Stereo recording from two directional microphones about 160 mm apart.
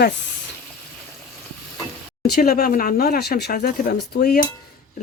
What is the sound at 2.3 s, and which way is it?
Speech, 70° left (ahead or behind).